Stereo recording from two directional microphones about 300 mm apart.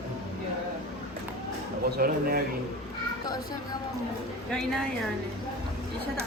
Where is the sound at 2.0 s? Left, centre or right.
Right.